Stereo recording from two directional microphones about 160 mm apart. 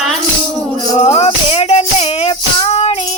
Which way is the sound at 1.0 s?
40° left (ahead or behind).